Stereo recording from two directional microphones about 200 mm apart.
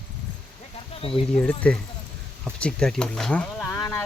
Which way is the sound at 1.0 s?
30° left (ahead or behind).